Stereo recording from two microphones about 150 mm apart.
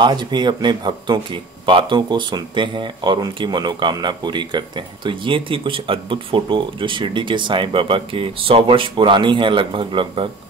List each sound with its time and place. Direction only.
0.0 s speech: 30° right (ahead or behind)